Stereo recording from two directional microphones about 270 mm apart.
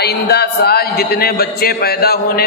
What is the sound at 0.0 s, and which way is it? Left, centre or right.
A man's voice, left.